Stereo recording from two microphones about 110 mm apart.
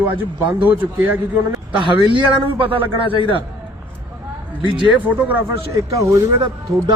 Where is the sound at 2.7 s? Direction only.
15° right (ahead or behind).